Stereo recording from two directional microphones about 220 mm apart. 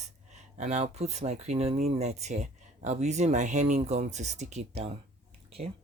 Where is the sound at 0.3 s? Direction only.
30° right (ahead or behind).